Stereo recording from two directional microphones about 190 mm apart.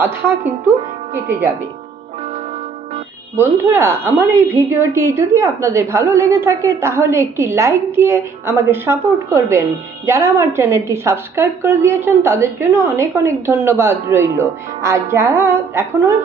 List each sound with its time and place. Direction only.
0.0 s a woman's voice: 15° right (ahead or behind)
3.3 s a woman's voice: 15° right (ahead or behind)